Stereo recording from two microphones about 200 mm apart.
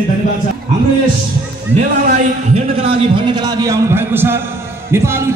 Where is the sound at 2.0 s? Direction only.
40° right (ahead or behind).